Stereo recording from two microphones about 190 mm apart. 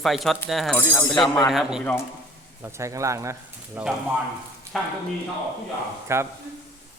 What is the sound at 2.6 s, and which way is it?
Speech, 15° right (ahead or behind).